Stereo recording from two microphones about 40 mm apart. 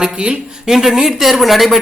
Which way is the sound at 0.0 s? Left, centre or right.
Right.